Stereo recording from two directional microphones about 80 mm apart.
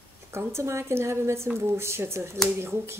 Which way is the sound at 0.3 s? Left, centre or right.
Right.